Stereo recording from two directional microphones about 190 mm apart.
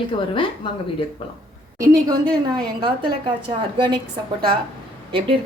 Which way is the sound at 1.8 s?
15° right (ahead or behind).